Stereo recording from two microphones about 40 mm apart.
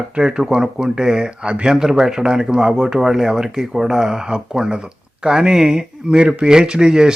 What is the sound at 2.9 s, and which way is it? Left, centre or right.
Speech, centre.